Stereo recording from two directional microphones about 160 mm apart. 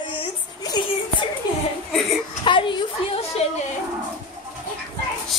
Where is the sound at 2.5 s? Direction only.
30° left (ahead or behind).